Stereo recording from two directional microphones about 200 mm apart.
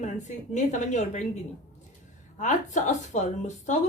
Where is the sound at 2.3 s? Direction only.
35° left (ahead or behind).